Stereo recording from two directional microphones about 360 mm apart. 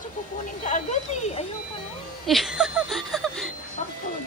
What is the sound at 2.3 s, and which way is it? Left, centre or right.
Speech, centre.